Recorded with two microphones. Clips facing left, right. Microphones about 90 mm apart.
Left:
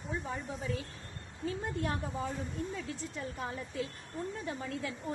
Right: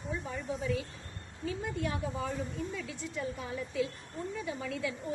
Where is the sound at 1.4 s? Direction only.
40° left (ahead or behind).